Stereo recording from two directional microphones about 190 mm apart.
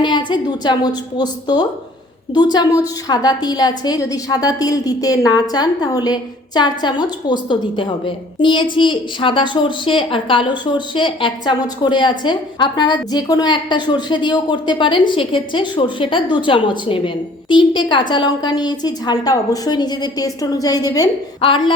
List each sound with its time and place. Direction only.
0.0 s a woman's voice: 25° left (ahead or behind)